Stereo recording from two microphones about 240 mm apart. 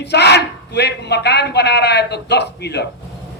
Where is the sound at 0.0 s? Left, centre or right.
Left.